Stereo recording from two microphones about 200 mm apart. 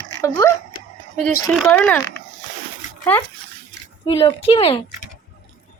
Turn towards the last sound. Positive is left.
turn(degrees=30)  # may be behind; listen again after turning